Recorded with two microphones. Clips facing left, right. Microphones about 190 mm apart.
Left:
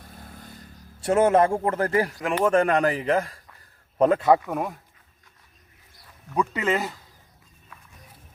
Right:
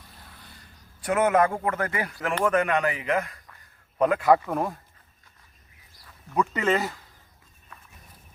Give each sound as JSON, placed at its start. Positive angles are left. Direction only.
{"t": 0.0, "sound": "vehicle", "side_deg": 50}
{"t": 1.0, "sound": "a man's voice", "side_deg": 30}
{"t": 2.1, "sound": "speech", "side_deg": 15}
{"t": 2.5, "sound": "a man's voice", "side_deg": 30}
{"t": 4.4, "sound": "speech", "side_deg": 5}
{"t": 6.3, "sound": "speech", "side_deg": 10}